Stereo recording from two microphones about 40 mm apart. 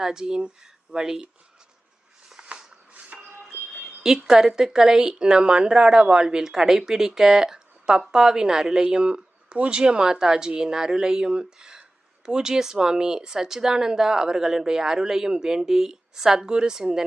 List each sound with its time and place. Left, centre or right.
0.0 s speech: centre
2.9 s music: right
4.2 s speech: centre
16.5 s speech: centre